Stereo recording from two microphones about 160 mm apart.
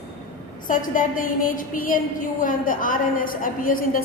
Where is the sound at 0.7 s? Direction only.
55° left (ahead or behind).